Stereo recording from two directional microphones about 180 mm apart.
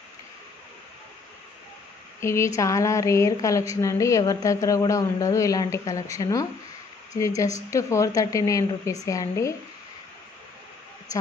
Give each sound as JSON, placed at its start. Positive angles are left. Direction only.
{"t": 2.1, "sound": "a woman's voice", "side_deg": 15}